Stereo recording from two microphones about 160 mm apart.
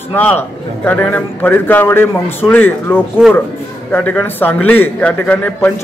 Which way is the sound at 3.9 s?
10° left (ahead or behind).